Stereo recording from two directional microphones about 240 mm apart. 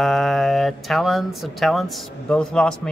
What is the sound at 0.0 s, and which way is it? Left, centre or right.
A man's voice, centre.